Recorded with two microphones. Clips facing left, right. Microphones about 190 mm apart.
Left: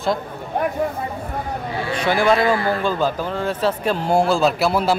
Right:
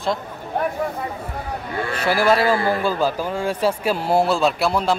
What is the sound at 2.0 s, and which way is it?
Speech, 5° right (ahead or behind).